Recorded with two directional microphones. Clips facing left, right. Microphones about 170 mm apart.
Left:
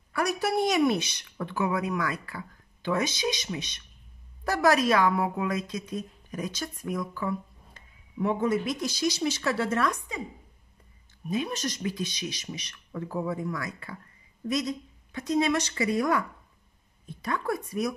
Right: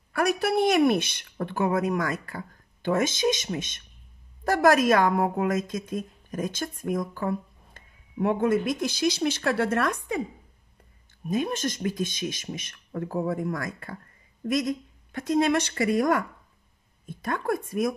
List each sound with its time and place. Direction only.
0.1 s a woman's voice: 55° right (ahead or behind)
11.2 s a woman's voice: 50° right (ahead or behind)